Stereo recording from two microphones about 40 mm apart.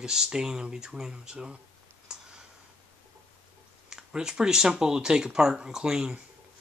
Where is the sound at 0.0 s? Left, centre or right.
Centre.